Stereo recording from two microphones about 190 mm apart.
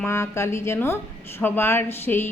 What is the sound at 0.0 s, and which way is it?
A woman's voice, 15° left (ahead or behind).